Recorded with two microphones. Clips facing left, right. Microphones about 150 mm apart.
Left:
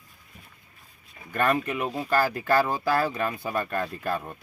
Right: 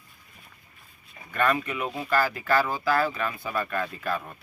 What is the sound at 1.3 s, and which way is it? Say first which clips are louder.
Speech: left 1 dB; 40° left (ahead or behind).